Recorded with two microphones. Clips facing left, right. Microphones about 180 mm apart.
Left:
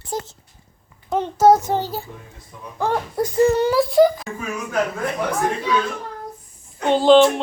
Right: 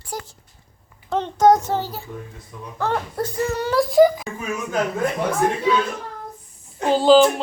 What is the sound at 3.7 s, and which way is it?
Speech, centre (ahead or behind).